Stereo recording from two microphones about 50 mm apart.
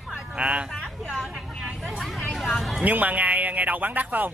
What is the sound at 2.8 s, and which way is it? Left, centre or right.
Speech, right.